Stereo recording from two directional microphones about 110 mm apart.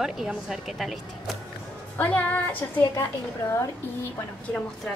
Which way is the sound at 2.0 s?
15° left (ahead or behind).